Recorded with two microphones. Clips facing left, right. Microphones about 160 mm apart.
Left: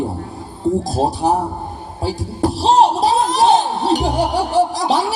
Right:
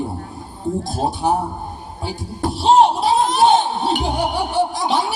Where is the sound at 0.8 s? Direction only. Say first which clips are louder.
Left 3 dB; 35° left (ahead or behind).